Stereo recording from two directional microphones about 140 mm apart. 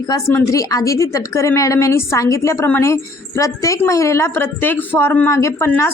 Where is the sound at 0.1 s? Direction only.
20° left (ahead or behind).